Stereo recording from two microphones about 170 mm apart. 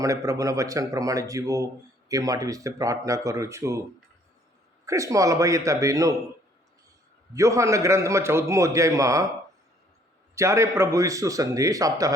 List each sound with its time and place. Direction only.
0.0 s a man's voice: 20° right (ahead or behind)
4.9 s a man's voice: 20° right (ahead or behind)
7.3 s a man's voice: 20° right (ahead or behind)
10.3 s a man's voice: 15° right (ahead or behind)